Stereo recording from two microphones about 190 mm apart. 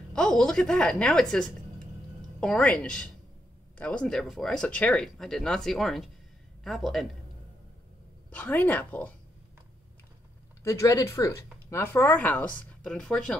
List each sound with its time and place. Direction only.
0.1 s speech: 5° left (ahead or behind)
8.3 s speech: 10° left (ahead or behind)
10.6 s speech: 15° left (ahead or behind)